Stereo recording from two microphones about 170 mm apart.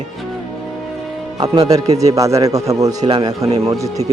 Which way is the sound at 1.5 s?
25° right (ahead or behind).